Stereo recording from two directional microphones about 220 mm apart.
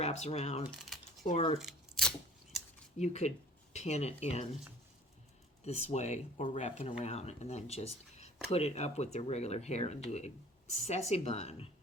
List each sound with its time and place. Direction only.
0.0 s speech: 30° left (ahead or behind)
1.5 s scissors: centre (ahead or behind)
3.0 s speech: 30° left (ahead or behind)
5.6 s speech: 30° left (ahead or behind)